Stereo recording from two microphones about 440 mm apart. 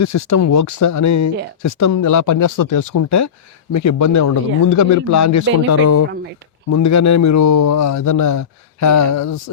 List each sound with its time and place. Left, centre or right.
0.0 s speech: left